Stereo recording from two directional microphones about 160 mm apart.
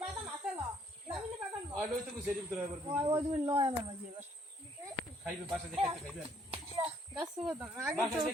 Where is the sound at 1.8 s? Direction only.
5° right (ahead or behind).